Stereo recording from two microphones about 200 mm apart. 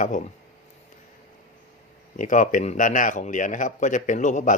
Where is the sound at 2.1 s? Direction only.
40° left (ahead or behind).